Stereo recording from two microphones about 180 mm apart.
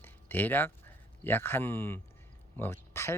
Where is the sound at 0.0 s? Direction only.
10° left (ahead or behind).